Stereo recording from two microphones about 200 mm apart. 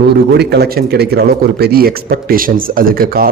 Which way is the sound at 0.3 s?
55° right (ahead or behind).